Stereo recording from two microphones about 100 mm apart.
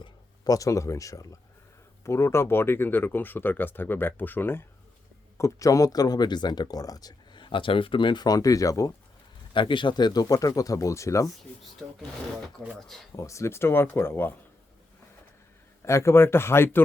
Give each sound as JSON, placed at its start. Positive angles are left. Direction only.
{"t": 0.4, "sound": "speech", "side_deg": 35}
{"t": 5.4, "sound": "speech", "side_deg": 35}
{"t": 9.5, "sound": "speech", "side_deg": 55}
{"t": 13.1, "sound": "speech", "side_deg": 30}
{"t": 15.8, "sound": "speech", "side_deg": 30}